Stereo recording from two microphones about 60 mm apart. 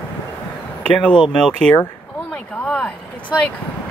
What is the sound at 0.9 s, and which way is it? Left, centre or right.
Speech, centre.